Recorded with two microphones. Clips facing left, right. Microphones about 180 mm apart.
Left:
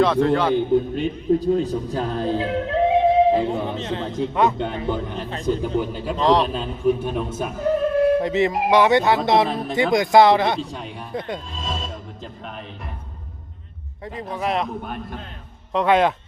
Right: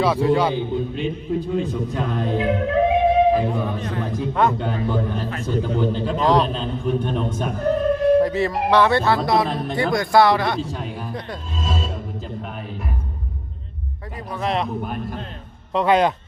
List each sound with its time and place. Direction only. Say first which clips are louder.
0.0 s a man's voice: left 2 dB; 10° right (ahead or behind)
0.5 s a man's voice: left 5 dB; 45° left (ahead or behind); by 5.4 s 20° left (ahead or behind)
5.5 s speech: even; 10° left (ahead or behind)
6.1 s a man's voice: left 1 dB; centre (ahead or behind)
8.2 s a man's voice: even; 20° left (ahead or behind)
9.5 s a man's voice: even; centre (ahead or behind)
9.9 s a man's voice: left 2 dB; 20° left (ahead or behind)
10.6 s a man's voice: right 2 dB; centre (ahead or behind)
11.6 s music: right 7 dB; 5° right (ahead or behind)
14.3 s a man's voice: right 1 dB; 5° left (ahead or behind)